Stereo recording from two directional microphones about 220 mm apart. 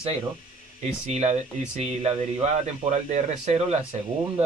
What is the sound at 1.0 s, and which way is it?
Speech, 30° right (ahead or behind).